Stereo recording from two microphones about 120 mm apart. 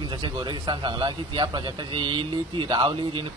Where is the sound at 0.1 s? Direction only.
40° right (ahead or behind).